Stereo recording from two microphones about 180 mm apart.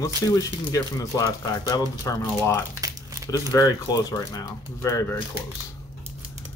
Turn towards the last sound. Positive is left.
turn(degrees=15)  # may be behind; listen again after turning